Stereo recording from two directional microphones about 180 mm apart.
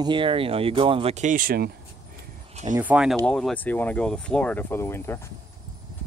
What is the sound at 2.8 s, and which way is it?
Speech, 5° right (ahead or behind).